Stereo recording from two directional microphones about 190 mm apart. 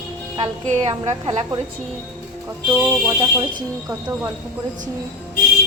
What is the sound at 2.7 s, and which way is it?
Speech, 15° right (ahead or behind).